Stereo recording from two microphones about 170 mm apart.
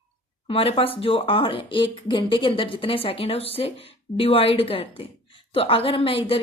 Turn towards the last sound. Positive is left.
turn(degrees=30)  # may be behind; listen again after turning